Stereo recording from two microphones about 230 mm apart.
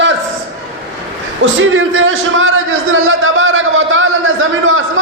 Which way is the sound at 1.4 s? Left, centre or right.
Right.